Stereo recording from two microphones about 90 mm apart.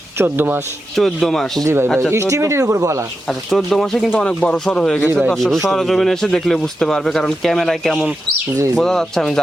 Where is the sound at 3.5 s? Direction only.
5° left (ahead or behind).